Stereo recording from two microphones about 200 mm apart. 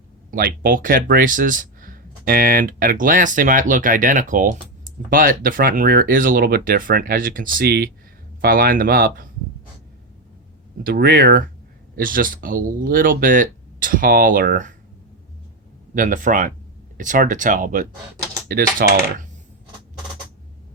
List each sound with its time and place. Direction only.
0.3 s speech: 45° right (ahead or behind)
10.8 s speech: 50° right (ahead or behind)
16.0 s speech: 40° right (ahead or behind)